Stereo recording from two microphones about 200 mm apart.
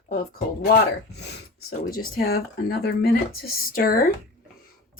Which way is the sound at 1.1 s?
55° left (ahead or behind).